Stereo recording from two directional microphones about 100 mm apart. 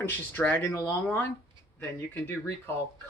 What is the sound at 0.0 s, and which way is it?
Speech, 15° left (ahead or behind).